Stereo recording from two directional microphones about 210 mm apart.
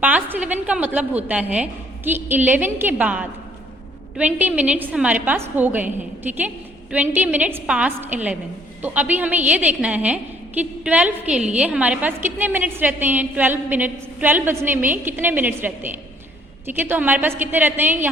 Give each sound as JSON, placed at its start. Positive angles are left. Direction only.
{"t": 0.0, "sound": "a woman's voice", "side_deg": -5}